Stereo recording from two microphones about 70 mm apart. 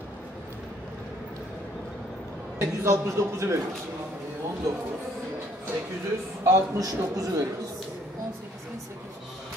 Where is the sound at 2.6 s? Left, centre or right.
Right.